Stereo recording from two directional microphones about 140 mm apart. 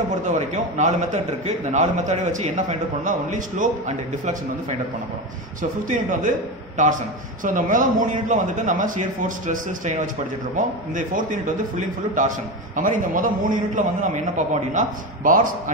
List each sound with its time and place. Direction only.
0.3 s a man's voice: 55° right (ahead or behind)